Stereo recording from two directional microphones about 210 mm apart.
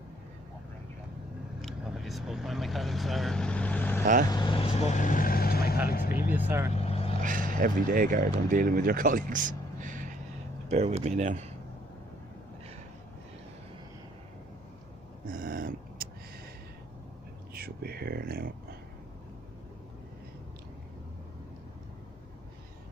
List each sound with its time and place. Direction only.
1.6 s speech: centre (ahead or behind)
4.0 s speech: 40° right (ahead or behind)
4.3 s vehicle: 20° left (ahead or behind); by 5.8 s 45° left (ahead or behind)
5.9 s speech: 45° left (ahead or behind)
6.7 s vehicle: 30° left (ahead or behind)
7.2 s speech: 40° right (ahead or behind)
15.3 s a sound: 40° right (ahead or behind)
17.5 s speech: 45° right (ahead or behind)